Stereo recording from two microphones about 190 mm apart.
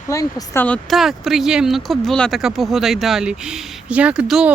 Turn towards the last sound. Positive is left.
turn(degrees=-5)  # may be behind; listen again after turning